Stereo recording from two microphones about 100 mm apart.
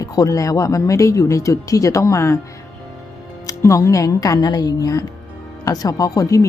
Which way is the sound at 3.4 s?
35° left (ahead or behind).